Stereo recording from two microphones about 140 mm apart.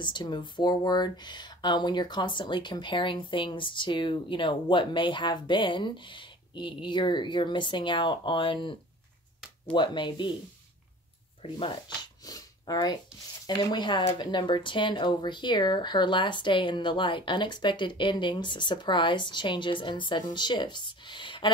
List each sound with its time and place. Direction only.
0.0 s speech: 35° left (ahead or behind)
9.8 s speech: 35° left (ahead or behind)
11.4 s speech: 35° left (ahead or behind)